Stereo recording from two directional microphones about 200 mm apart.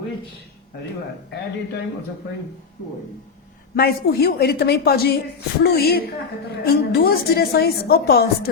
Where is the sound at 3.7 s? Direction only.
50° left (ahead or behind).